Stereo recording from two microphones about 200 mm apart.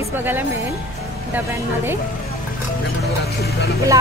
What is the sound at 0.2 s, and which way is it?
Speech, 10° right (ahead or behind).